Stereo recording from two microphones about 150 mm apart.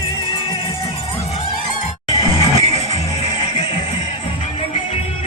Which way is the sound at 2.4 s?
40° left (ahead or behind).